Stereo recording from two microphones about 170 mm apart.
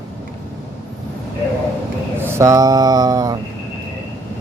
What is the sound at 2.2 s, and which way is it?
Speech, 15° right (ahead or behind).